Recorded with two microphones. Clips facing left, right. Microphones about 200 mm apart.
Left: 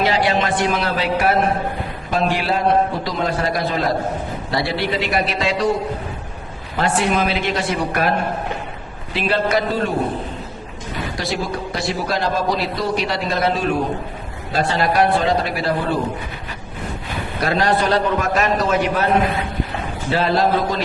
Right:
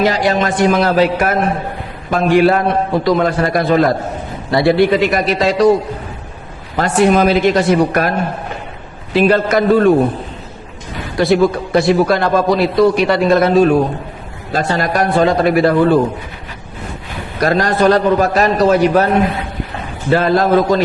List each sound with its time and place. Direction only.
0.0 s a man's voice: 45° right (ahead or behind)
6.7 s a man's voice: 45° right (ahead or behind)
9.1 s a man's voice: 45° right (ahead or behind)
11.2 s a man's voice: 55° right (ahead or behind)
17.4 s a man's voice: 45° right (ahead or behind)
20.1 s a man's voice: 50° right (ahead or behind)